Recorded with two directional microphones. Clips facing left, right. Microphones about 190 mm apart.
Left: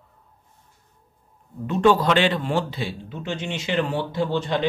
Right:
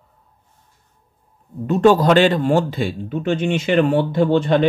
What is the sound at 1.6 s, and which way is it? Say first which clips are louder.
A man's voice: right 5 dB; 40° right (ahead or behind).